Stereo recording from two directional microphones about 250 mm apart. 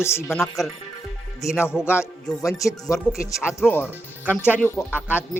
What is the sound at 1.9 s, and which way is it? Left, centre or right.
Speech, centre.